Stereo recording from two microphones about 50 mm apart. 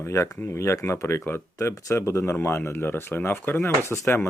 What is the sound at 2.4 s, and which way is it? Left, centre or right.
Speech, left.